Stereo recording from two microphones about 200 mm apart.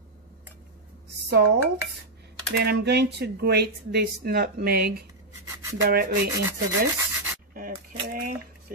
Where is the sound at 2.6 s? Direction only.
55° right (ahead or behind).